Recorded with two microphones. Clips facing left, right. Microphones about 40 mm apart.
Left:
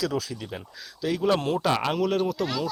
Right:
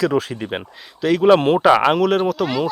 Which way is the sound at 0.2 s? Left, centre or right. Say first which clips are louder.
Right 10 dB; right.